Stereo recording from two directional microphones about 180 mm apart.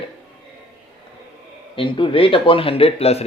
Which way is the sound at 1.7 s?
30° left (ahead or behind).